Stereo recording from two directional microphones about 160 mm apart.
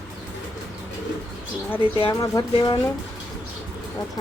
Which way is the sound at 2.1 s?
20° left (ahead or behind).